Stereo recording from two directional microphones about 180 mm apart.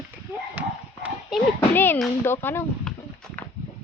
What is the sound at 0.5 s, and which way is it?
Dog, 10° right (ahead or behind).